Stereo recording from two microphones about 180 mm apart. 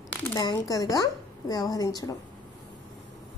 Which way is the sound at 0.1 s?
10° left (ahead or behind).